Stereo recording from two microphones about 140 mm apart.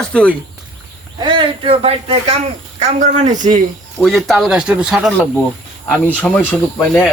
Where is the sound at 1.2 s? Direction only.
40° right (ahead or behind); by 3.6 s 60° right (ahead or behind).